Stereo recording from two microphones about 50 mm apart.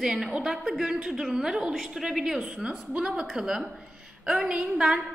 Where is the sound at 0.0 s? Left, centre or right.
Centre.